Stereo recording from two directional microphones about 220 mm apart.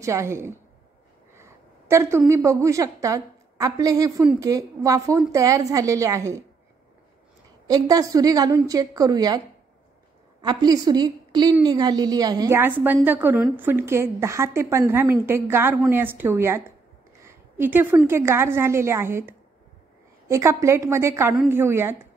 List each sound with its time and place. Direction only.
0.0 s a woman's voice: 15° right (ahead or behind)
7.6 s a woman's voice: 15° right (ahead or behind)
10.4 s a woman's voice: 20° right (ahead or behind)